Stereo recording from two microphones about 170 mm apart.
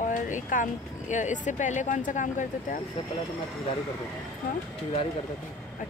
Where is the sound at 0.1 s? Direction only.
50° left (ahead or behind).